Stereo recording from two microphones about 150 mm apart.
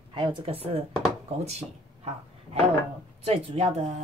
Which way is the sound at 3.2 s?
45° right (ahead or behind).